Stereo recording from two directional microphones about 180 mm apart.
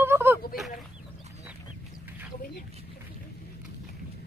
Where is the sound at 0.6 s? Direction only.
Centre (ahead or behind).